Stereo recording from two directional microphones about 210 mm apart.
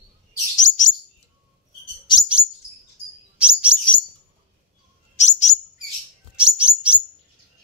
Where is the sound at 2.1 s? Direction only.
20° left (ahead or behind).